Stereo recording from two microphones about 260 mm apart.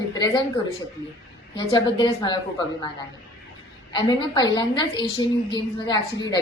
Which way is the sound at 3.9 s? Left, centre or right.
Centre.